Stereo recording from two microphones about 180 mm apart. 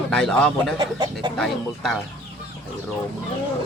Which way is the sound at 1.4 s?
Centre (ahead or behind).